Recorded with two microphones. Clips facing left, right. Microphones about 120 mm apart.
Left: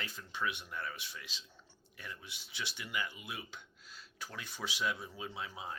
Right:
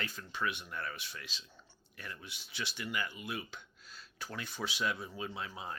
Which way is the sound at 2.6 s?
10° left (ahead or behind).